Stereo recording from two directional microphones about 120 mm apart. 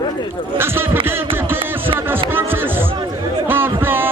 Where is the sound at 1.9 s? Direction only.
15° right (ahead or behind).